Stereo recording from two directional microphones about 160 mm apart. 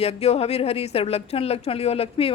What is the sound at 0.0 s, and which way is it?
A woman's voice, 40° left (ahead or behind).